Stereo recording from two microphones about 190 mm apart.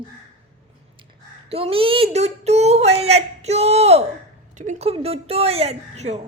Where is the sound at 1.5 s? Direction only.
30° right (ahead or behind).